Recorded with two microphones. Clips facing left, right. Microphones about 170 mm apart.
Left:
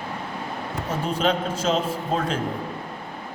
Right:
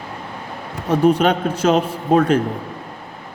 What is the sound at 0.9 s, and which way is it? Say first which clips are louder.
Speech: right 9 dB; 65° right (ahead or behind).